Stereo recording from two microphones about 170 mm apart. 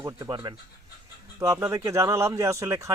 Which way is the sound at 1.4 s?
15° right (ahead or behind).